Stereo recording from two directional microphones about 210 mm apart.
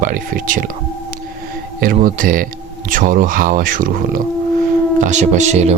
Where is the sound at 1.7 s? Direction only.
40° right (ahead or behind).